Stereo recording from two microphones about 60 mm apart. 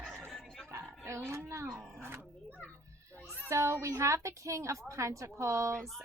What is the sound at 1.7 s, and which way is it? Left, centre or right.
Dog, right.